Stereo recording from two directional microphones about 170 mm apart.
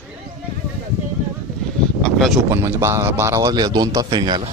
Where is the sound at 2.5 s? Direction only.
15° right (ahead or behind).